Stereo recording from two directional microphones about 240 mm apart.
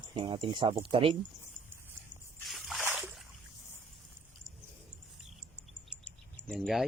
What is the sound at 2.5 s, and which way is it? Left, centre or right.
Splash, centre.